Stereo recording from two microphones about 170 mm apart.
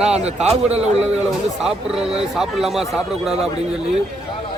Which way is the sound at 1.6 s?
5° right (ahead or behind).